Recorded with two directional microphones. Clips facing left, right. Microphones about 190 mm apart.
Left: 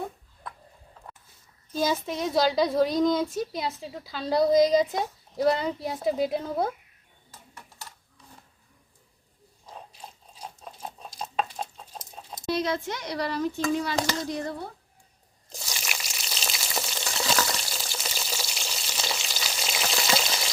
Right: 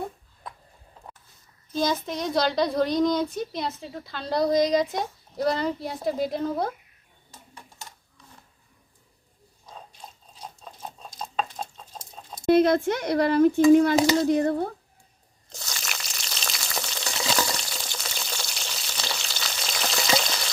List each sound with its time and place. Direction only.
1.7 s a woman's voice: 5° left (ahead or behind)
10.4 s chicken: 10° left (ahead or behind)
12.5 s speech: 55° right (ahead or behind)
15.4 s frying: 5° left (ahead or behind)